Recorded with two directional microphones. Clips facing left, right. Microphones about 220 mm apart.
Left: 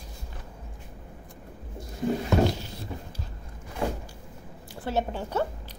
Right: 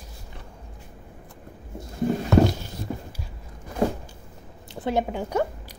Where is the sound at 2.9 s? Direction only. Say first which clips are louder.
Right 7 dB; 40° right (ahead or behind).